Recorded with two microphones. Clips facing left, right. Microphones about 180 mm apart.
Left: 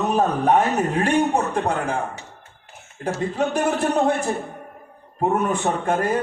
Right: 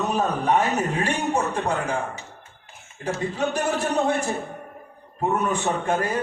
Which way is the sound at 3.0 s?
55° left (ahead or behind).